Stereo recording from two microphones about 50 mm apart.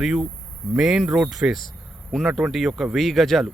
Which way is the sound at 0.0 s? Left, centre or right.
Centre.